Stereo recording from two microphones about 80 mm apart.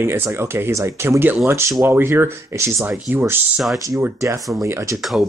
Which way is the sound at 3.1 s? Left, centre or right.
Right.